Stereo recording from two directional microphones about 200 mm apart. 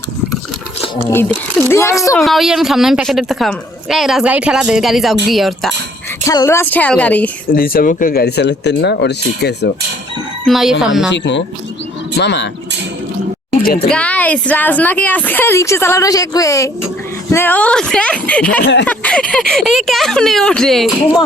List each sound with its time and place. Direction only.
1.1 s a woman's voice: 10° left (ahead or behind)
2.1 s a woman's voice: centre (ahead or behind)
6.2 s a woman's voice: 15° left (ahead or behind)
7.5 s speech: 45° left (ahead or behind)
10.4 s a woman's voice: centre (ahead or behind)
11.1 s speech: 65° left (ahead or behind)
13.6 s speech: 45° left (ahead or behind)
13.9 s a woman's voice: 5° left (ahead or behind)
18.6 s speech: 60° left (ahead or behind)
18.9 s a woman's voice: 5° left (ahead or behind)